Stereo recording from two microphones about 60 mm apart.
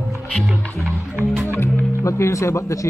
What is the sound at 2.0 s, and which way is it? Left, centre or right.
Speech, left.